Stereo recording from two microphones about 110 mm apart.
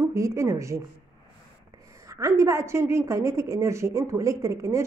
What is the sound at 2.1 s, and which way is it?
A woman's voice, 25° right (ahead or behind).